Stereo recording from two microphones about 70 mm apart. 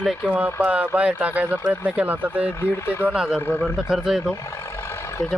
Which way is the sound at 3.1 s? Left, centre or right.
Centre.